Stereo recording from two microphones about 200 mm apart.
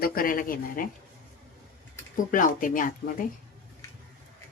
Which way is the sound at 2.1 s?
40° left (ahead or behind).